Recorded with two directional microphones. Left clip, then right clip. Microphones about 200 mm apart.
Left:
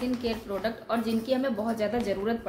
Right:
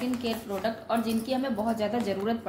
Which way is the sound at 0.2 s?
15° left (ahead or behind).